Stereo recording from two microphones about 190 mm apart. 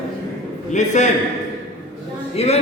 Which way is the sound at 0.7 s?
40° left (ahead or behind).